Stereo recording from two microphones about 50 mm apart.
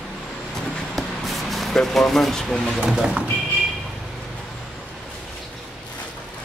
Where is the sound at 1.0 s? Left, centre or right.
Centre.